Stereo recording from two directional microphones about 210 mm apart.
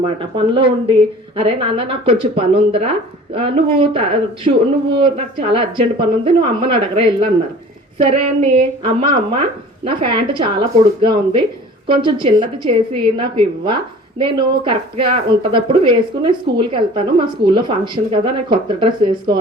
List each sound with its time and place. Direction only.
0.0 s speech: 25° right (ahead or behind)
8.1 s speech: 30° right (ahead or behind)